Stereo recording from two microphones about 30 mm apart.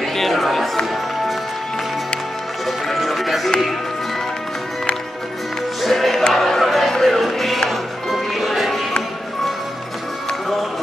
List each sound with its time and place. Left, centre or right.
0.0 s a sound: centre
2.6 s music: centre
5.9 s music: centre
6.6 s music: centre